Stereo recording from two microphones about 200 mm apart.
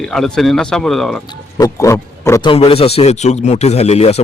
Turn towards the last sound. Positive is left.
turn(degrees=30)  # may be behind; listen again after turning